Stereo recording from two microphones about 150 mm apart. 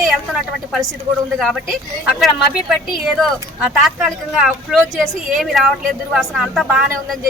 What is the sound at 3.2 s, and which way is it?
Speech, centre (ahead or behind).